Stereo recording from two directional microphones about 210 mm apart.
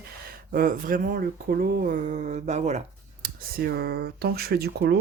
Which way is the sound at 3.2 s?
45° right (ahead or behind).